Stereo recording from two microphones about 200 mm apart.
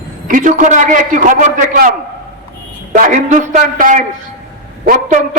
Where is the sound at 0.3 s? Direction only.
40° right (ahead or behind).